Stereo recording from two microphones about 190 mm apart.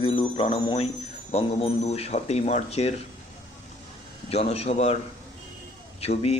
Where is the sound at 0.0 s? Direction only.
30° left (ahead or behind).